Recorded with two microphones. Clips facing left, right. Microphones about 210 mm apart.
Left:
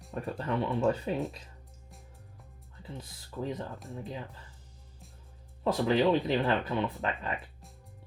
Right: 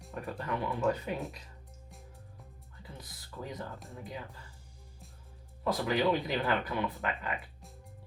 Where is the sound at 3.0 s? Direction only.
25° left (ahead or behind).